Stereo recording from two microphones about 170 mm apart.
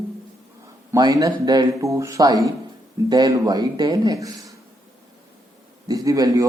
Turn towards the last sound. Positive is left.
turn(degrees=-20)  # may be behind; listen again after turning